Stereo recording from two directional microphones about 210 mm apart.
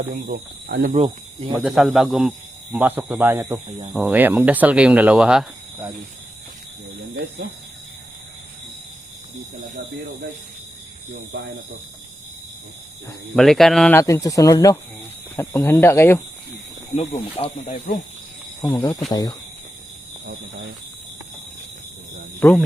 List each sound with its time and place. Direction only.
0.1 s speech: 45° right (ahead or behind)
0.9 s speech: 25° right (ahead or behind)
1.5 s speech: centre (ahead or behind)
11.1 s speech: 55° right (ahead or behind)
13.3 s speech: centre (ahead or behind)
14.0 s speech: 15° left (ahead or behind)
16.9 s speech: 30° left (ahead or behind)
18.6 s speech: 15° left (ahead or behind)
22.4 s speech: 10° left (ahead or behind)